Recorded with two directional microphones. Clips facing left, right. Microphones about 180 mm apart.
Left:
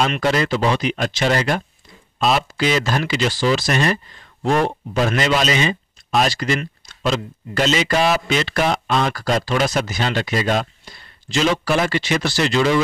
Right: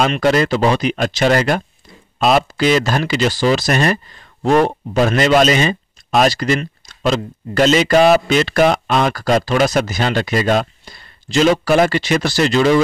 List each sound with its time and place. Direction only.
0.2 s speech: 45° right (ahead or behind)